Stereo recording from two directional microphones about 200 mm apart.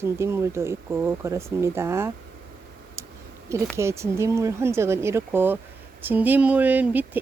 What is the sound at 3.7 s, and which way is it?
Speech, 15° right (ahead or behind).